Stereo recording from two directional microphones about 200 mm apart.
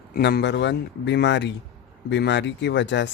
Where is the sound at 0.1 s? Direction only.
50° left (ahead or behind).